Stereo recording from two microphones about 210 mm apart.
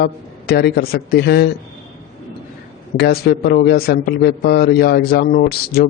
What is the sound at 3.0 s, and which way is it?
A man's voice, 50° left (ahead or behind).